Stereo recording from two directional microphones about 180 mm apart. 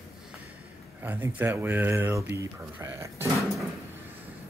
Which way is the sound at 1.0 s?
10° right (ahead or behind).